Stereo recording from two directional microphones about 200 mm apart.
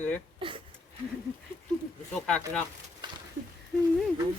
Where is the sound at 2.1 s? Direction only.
5° left (ahead or behind).